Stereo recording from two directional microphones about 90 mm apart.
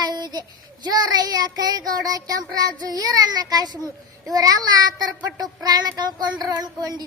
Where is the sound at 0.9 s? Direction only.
50° right (ahead or behind).